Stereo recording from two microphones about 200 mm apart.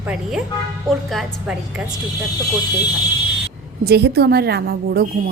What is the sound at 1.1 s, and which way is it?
Speech, centre (ahead or behind).